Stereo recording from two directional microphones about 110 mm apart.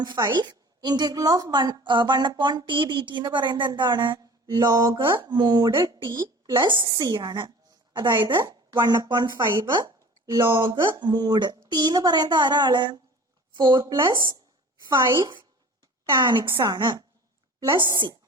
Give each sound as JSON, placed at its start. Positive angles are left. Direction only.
{"t": 0.0, "sound": "a woman's voice", "side_deg": -40}
{"t": 16.1, "sound": "a woman's voice", "side_deg": -45}